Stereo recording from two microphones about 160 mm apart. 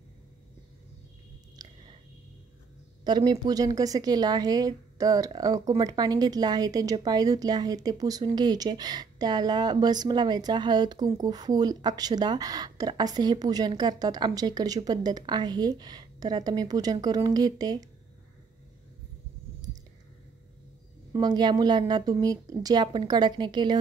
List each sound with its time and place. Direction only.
1.6 s chewing: 25° right (ahead or behind)
3.0 s speech: 25° right (ahead or behind)
21.1 s speech: 25° right (ahead or behind)